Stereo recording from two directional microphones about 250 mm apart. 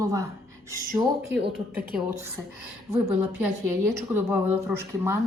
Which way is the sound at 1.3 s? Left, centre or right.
Right.